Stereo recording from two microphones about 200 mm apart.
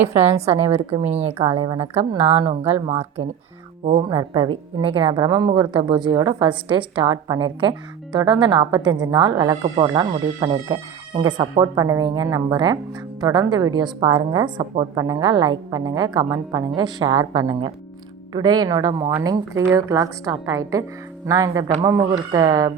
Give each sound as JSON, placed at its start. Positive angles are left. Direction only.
{"t": 0.0, "sound": "speech", "side_deg": -10}
{"t": 0.9, "sound": "speech", "side_deg": -30}
{"t": 1.5, "sound": "speech", "side_deg": -20}